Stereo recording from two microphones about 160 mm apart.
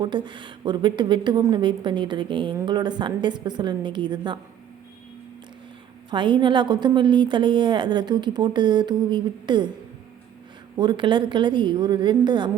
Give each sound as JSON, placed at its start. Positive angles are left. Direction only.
{"t": 0.0, "sound": "a woman's voice", "side_deg": -30}
{"t": 6.1, "sound": "a woman's voice", "side_deg": -30}
{"t": 10.8, "sound": "a woman's voice", "side_deg": -30}